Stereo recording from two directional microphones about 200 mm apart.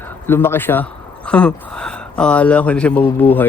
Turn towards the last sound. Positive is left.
turn(degrees=10)  # may be behind; listen again after turning